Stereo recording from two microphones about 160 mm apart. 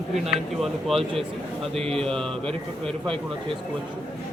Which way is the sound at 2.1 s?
5° left (ahead or behind).